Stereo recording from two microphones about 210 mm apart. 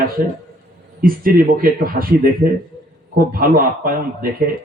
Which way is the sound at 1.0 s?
45° right (ahead or behind).